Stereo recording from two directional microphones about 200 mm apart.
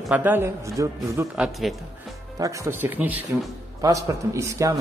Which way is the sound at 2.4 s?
15° right (ahead or behind).